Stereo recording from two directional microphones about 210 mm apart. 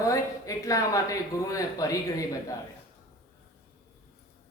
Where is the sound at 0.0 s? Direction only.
15° left (ahead or behind).